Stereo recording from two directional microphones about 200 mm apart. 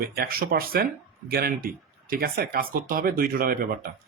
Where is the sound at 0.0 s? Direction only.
50° right (ahead or behind).